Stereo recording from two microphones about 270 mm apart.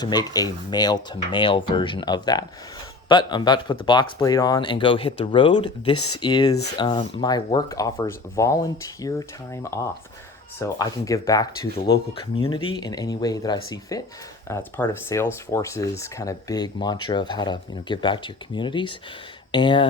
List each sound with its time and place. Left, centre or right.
0.0 s speech: centre